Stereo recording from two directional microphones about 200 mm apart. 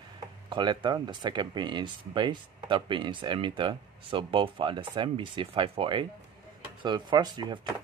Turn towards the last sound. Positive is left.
turn(degrees=-20)  # may be behind; listen again after turning